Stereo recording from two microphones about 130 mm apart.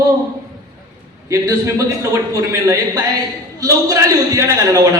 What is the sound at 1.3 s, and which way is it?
Speech, 25° right (ahead or behind).